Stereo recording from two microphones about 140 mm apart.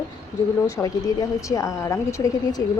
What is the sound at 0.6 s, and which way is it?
A woman's voice, 25° left (ahead or behind).